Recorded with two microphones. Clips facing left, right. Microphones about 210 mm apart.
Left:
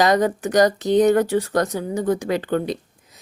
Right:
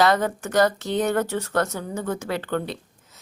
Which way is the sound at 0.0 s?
15° left (ahead or behind).